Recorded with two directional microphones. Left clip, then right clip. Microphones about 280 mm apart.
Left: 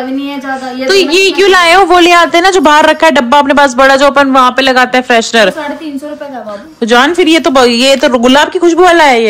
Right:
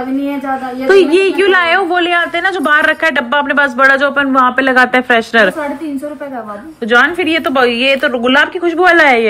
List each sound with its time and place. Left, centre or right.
0.8 s a woman's voice: centre
6.8 s a woman's voice: centre